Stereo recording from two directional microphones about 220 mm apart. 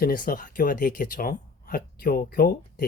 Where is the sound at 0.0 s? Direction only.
40° left (ahead or behind).